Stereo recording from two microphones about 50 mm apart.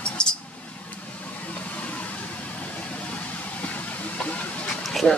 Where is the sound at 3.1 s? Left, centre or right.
Left.